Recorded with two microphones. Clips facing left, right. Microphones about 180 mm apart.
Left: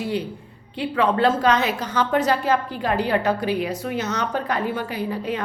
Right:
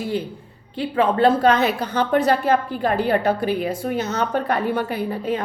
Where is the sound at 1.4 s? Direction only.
55° right (ahead or behind).